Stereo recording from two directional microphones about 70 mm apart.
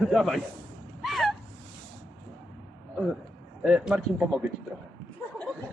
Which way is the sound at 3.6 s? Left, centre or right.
Centre.